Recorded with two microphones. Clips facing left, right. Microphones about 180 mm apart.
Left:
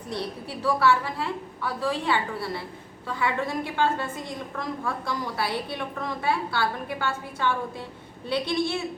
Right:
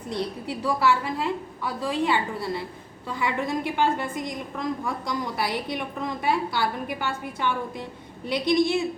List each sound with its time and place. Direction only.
0.1 s a woman's voice: 15° right (ahead or behind)